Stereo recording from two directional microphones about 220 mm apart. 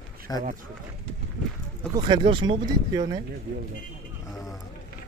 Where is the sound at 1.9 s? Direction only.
20° right (ahead or behind).